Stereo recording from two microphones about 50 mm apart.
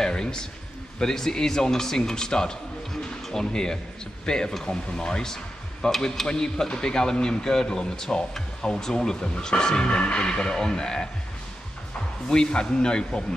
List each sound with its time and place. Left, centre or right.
0.0 s a sound: centre
0.9 s a man's voice: centre
12.3 s speech: centre